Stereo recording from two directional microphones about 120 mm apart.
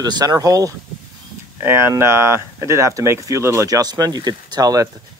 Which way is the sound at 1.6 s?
20° right (ahead or behind).